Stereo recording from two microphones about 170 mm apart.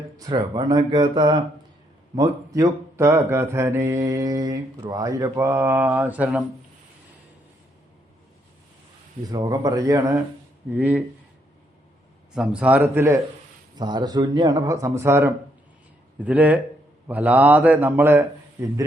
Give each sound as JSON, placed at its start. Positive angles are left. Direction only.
{"t": 0.2, "sound": "speech", "side_deg": -25}
{"t": 9.3, "sound": "speech", "side_deg": -25}
{"t": 12.3, "sound": "speech", "side_deg": -5}